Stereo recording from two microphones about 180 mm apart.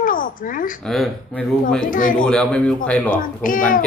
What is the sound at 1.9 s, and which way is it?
Speech, 50° left (ahead or behind).